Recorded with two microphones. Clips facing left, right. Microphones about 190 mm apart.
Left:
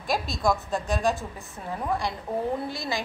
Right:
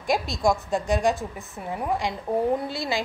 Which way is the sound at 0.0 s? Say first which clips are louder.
Right 3 dB; 20° right (ahead or behind).